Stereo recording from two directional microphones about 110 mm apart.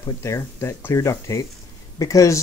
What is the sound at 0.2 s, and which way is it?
Speech, 25° left (ahead or behind).